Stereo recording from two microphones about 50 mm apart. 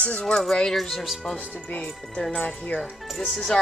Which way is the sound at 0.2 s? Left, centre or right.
Centre.